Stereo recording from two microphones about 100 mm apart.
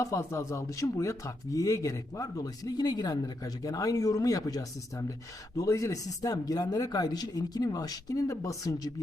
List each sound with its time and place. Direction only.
0.0 s speech: 30° left (ahead or behind)